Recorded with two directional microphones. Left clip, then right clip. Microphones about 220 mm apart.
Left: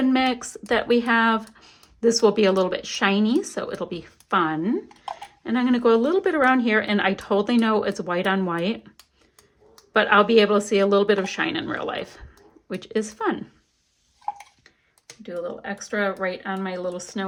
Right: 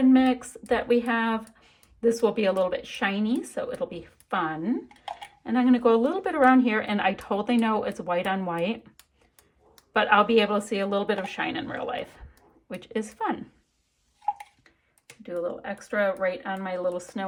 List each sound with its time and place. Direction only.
0.1 s a woman's voice: 15° left (ahead or behind)
9.9 s a woman's voice: 10° left (ahead or behind)
15.2 s speech: 5° left (ahead or behind)